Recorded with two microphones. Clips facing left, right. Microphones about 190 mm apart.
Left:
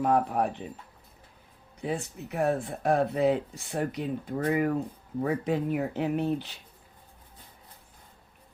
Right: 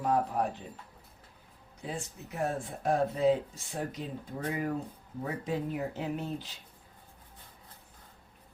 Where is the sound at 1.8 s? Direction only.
65° left (ahead or behind).